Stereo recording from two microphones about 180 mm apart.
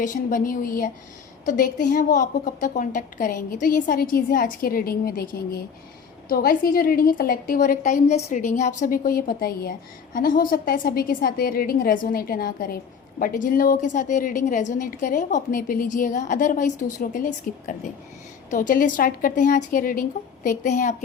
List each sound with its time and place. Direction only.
0.0 s a woman's voice: 45° left (ahead or behind)